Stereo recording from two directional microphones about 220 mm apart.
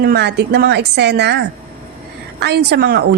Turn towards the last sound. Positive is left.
turn(degrees=-45)  # may be behind; listen again after turning